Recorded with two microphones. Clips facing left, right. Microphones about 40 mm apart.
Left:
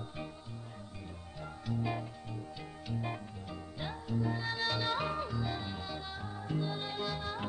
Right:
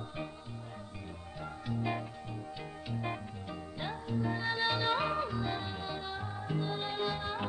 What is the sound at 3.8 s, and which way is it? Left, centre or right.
Music, centre.